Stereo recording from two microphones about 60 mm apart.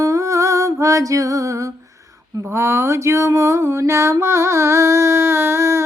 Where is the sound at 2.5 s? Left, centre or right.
Right.